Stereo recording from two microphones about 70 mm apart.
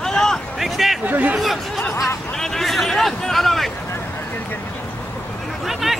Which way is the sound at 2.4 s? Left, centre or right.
Centre.